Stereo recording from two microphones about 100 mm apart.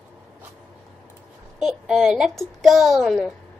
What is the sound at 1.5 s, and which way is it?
A child's voice, 5° right (ahead or behind).